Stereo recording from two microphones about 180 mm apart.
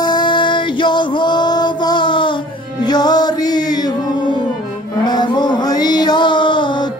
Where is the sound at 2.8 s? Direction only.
20° left (ahead or behind).